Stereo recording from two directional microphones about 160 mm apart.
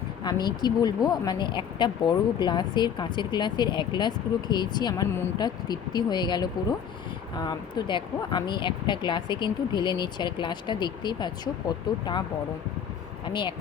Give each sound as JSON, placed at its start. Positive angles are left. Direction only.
{"t": 0.3, "sound": "speech", "side_deg": 25}
{"t": 13.2, "sound": "speech", "side_deg": 30}